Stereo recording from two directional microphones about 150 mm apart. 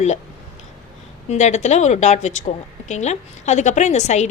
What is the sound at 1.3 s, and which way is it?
A woman's voice, 50° left (ahead or behind).